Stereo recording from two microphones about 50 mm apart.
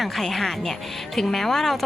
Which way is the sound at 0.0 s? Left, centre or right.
Centre.